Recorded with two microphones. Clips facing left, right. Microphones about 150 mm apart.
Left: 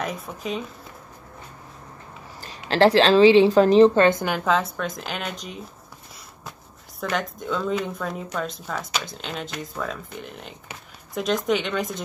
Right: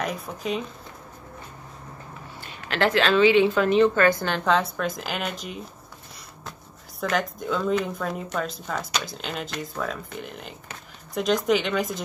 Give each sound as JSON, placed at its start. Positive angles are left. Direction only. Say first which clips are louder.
{"t": 0.0, "sound": "speech", "louder": "right 1 dB", "side_deg": 0}
{"t": 2.7, "sound": "a woman's voice", "louder": "left 5 dB", "side_deg": 30}
{"t": 4.3, "sound": "speech", "louder": "even", "side_deg": 0}
{"t": 7.0, "sound": "speech", "louder": "right 1 dB", "side_deg": 0}